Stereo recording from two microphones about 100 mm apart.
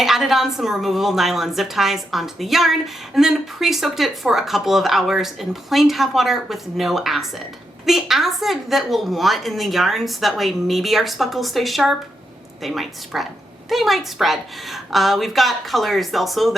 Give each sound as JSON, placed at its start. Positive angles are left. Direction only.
{"t": 0.0, "sound": "a woman's voice", "side_deg": 0}